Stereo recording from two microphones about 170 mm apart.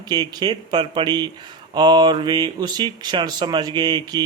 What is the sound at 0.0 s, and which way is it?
Speech, 25° right (ahead or behind).